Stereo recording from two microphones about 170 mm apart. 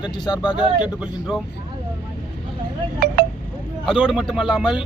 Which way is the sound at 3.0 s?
60° right (ahead or behind).